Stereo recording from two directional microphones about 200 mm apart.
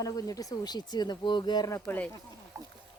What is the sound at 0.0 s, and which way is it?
Speech, 15° left (ahead or behind).